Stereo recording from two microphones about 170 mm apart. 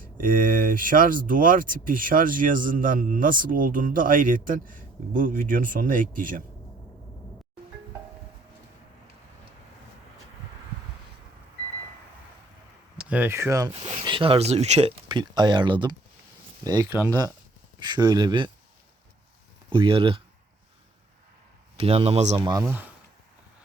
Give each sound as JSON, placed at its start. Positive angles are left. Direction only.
{"t": 0.0, "sound": "speech", "side_deg": -55}
{"t": 13.0, "sound": "speech", "side_deg": -10}
{"t": 13.7, "sound": "speech", "side_deg": -35}
{"t": 15.0, "sound": "speech", "side_deg": -25}
{"t": 19.7, "sound": "speech", "side_deg": -30}
{"t": 21.8, "sound": "speech", "side_deg": -35}
{"t": 22.4, "sound": "speech", "side_deg": -20}